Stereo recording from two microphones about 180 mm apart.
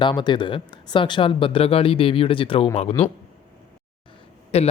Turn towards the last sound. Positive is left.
turn(degrees=35)  # may be behind; listen again after turning